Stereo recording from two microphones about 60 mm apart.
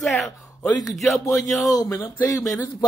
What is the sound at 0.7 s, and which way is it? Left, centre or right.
Speech, left.